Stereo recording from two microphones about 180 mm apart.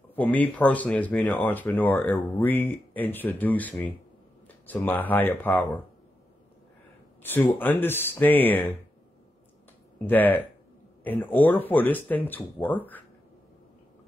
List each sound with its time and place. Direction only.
0.1 s speech: 10° left (ahead or behind)
7.2 s speech: 10° left (ahead or behind)
10.0 s speech: 10° left (ahead or behind)